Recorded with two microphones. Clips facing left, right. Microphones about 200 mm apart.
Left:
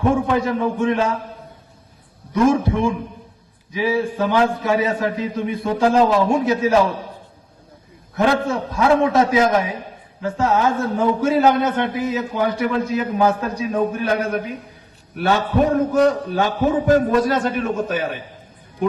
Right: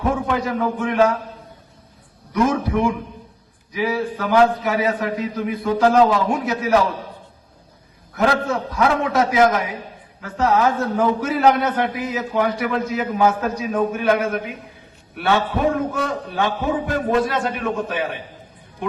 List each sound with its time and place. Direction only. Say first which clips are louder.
0.1 s a man's voice: left 3 dB; 25° left (ahead or behind)
2.3 s a man's voice: left 3 dB; 25° left (ahead or behind)
8.1 s a man's voice: left 1 dB; 25° left (ahead or behind); by 18.2 s 45° left (ahead or behind)